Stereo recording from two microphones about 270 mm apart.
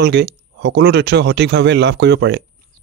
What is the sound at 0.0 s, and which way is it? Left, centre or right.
Speech, right.